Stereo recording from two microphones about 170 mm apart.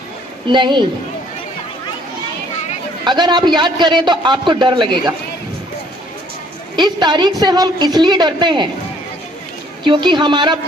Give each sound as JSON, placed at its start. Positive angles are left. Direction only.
{"t": 0.4, "sound": "a man's voice", "side_deg": -30}
{"t": 3.0, "sound": "a man's voice", "side_deg": -25}
{"t": 6.7, "sound": "a man's voice", "side_deg": -25}
{"t": 9.8, "sound": "a man's voice", "side_deg": -30}